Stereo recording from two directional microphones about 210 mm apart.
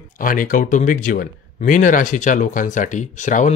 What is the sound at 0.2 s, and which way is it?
Speech, 40° left (ahead or behind).